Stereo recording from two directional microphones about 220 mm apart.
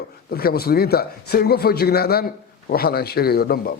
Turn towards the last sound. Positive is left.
turn(degrees=45)  # may be behind; listen again after turning